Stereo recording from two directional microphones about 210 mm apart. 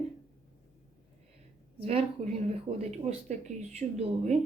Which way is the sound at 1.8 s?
30° right (ahead or behind).